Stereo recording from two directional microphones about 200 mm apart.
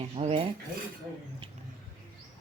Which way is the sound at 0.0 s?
30° right (ahead or behind).